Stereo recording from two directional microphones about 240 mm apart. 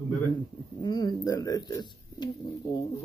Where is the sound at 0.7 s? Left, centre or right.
Centre.